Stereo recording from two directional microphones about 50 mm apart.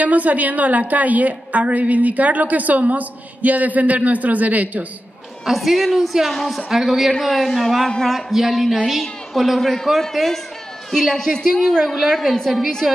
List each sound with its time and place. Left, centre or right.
0.0 s a woman's voice: right
5.4 s a man's voice: centre